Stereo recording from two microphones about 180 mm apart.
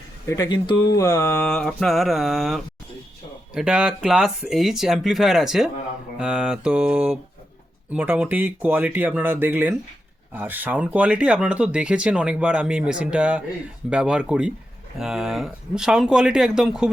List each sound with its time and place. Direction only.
0.3 s speech: 20° left (ahead or behind); by 16.9 s 5° right (ahead or behind)